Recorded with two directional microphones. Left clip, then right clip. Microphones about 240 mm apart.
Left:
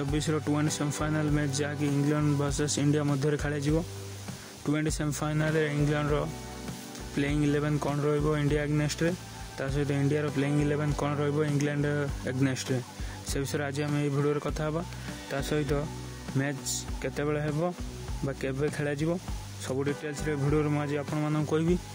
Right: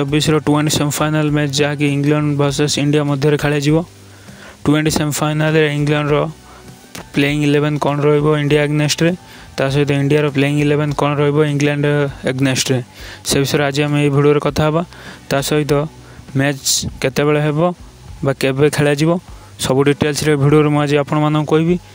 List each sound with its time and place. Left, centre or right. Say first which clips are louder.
0.0 s speech: right 15 dB; right